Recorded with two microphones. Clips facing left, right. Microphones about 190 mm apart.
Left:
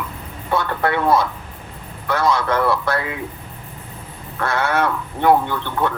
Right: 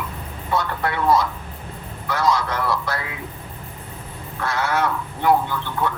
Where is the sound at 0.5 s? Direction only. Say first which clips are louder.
Left 3 dB; 55° left (ahead or behind).